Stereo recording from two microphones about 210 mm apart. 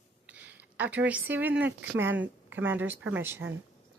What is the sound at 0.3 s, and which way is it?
A woman's voice, 5° right (ahead or behind).